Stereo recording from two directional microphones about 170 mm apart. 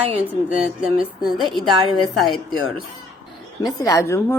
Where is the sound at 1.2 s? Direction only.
Centre (ahead or behind).